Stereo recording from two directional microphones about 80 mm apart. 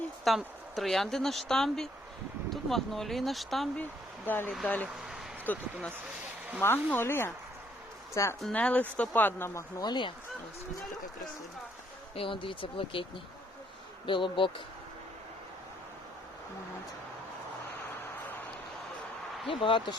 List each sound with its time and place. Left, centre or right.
0.3 s speech: centre
4.6 s a woman's voice: centre; by 8.4 s left
8.5 s speech: centre
9.8 s speech: left
12.2 s speech: left
14.1 s speech: left
19.5 s speech: left